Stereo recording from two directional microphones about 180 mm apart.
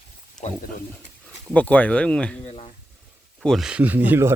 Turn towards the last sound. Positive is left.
turn(degrees=-10)  # may be behind; listen again after turning